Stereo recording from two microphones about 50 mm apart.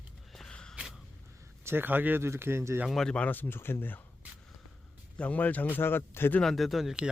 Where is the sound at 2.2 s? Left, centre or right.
Right.